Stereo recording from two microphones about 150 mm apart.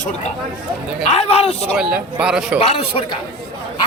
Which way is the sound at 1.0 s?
45° left (ahead or behind).